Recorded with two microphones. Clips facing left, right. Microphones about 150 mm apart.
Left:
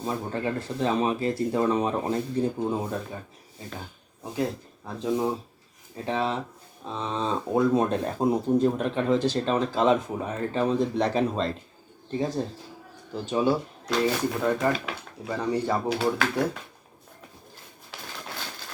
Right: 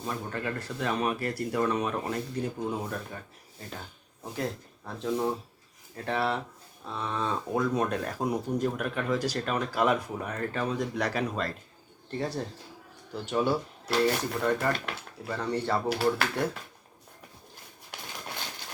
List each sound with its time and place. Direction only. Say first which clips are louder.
0.0 s speech: left 5 dB; 25° left (ahead or behind)
12.1 s speech: left 5 dB; 15° left (ahead or behind)
15.9 s speech: left 2 dB; 5° right (ahead or behind)